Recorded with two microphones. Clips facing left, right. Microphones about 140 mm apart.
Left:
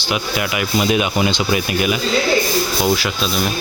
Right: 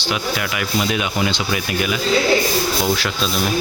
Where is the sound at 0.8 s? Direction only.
15° left (ahead or behind).